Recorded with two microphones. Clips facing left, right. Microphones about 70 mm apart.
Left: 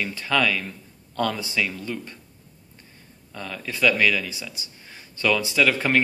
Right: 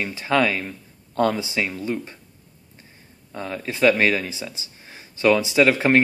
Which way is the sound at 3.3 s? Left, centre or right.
Right.